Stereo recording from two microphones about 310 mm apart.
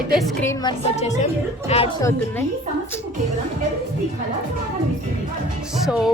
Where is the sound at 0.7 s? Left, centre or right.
Left.